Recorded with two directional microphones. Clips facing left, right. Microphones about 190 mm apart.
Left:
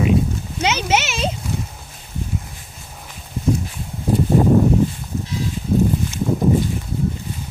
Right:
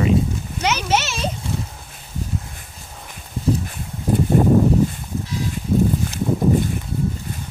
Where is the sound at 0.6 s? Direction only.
20° left (ahead or behind).